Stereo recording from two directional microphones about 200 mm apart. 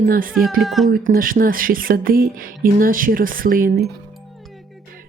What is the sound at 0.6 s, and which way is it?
Speech, centre (ahead or behind).